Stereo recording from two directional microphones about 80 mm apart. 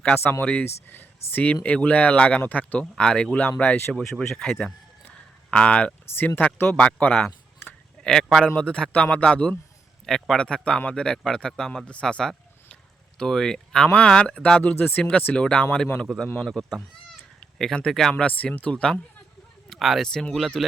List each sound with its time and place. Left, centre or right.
0.2 s speech: left
4.0 s speech: centre
5.0 s a sound: centre
6.1 s speech: left
6.7 s speech: centre
16.7 s cat: centre
18.1 s speech: centre